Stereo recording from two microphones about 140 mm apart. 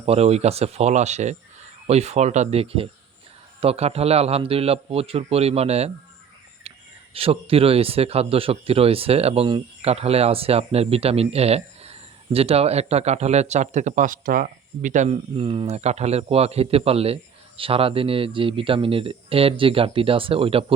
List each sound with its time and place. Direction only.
0.0 s speech: 45° right (ahead or behind); by 15.1 s 65° right (ahead or behind)
15.1 s a man's voice: 40° right (ahead or behind)